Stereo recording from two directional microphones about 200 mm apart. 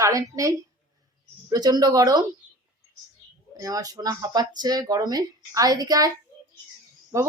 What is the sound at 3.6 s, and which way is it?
Speech, 15° right (ahead or behind).